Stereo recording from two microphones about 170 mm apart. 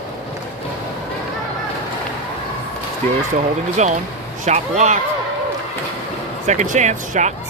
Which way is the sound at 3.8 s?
45° right (ahead or behind).